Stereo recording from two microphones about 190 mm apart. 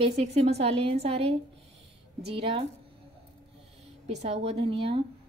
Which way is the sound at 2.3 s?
25° right (ahead or behind).